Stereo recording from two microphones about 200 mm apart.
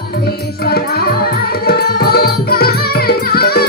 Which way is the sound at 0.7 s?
50° left (ahead or behind).